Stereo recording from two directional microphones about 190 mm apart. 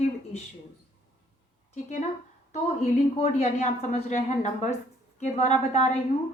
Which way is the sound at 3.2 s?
35° left (ahead or behind).